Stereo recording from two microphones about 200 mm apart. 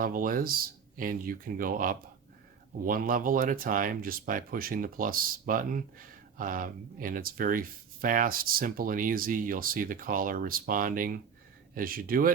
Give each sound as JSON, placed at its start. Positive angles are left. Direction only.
{"t": 0.0, "sound": "speech", "side_deg": -45}